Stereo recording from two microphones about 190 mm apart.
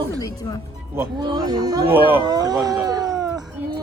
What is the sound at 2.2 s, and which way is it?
Speech, 20° right (ahead or behind).